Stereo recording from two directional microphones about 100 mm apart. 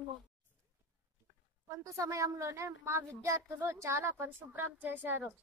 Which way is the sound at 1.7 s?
30° right (ahead or behind).